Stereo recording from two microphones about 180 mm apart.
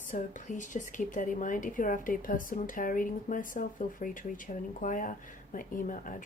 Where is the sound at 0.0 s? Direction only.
45° left (ahead or behind).